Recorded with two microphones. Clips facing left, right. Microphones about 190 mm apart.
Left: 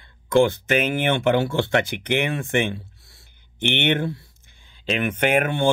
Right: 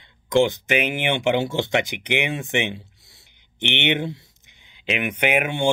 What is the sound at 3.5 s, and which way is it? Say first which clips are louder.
Speech: left 2 dB; 15° right (ahead or behind).